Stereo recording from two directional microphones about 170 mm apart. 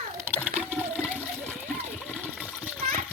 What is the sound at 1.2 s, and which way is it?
Water, 10° right (ahead or behind).